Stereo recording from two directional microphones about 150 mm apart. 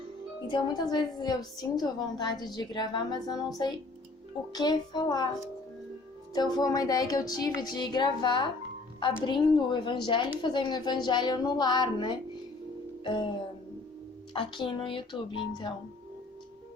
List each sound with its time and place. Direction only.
0.4 s a woman's voice: 30° left (ahead or behind)
4.5 s a woman's voice: 30° left (ahead or behind)
6.3 s a woman's voice: 25° left (ahead or behind)
14.3 s speech: 35° left (ahead or behind)